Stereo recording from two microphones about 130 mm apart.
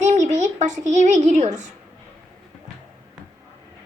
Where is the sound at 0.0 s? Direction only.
65° right (ahead or behind).